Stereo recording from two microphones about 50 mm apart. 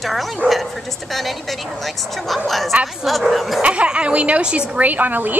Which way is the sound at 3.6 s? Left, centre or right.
Right.